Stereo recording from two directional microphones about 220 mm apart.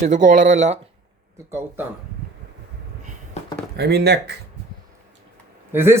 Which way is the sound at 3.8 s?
45° right (ahead or behind).